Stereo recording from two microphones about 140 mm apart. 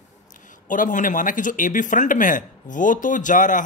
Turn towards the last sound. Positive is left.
turn(degrees=70)  # may be behind; listen again after turning